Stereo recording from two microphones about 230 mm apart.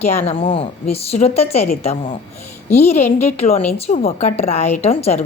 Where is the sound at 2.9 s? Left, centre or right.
Left.